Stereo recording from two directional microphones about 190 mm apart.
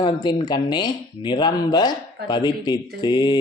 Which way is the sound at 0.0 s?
25° left (ahead or behind).